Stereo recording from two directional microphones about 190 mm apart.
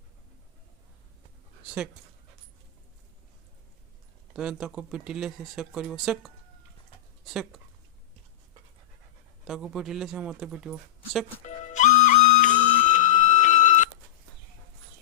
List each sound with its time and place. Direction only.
1.6 s speech: 5° right (ahead or behind)
4.4 s speech: 5° right (ahead or behind)
9.4 s speech: centre (ahead or behind)
11.4 s music: 40° left (ahead or behind)